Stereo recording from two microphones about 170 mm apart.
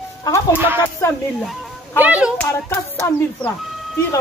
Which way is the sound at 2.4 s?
15° left (ahead or behind).